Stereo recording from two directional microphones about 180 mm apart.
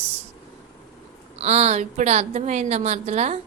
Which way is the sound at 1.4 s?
35° right (ahead or behind).